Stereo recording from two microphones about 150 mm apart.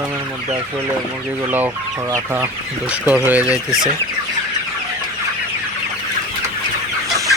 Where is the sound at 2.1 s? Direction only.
15° right (ahead or behind).